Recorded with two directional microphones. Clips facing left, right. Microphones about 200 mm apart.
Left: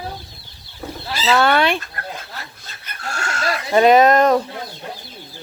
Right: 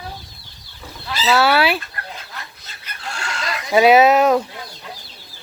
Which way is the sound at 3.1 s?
45° left (ahead or behind).